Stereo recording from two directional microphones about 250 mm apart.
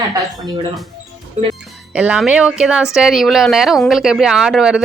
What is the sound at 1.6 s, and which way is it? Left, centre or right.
A woman's voice, centre.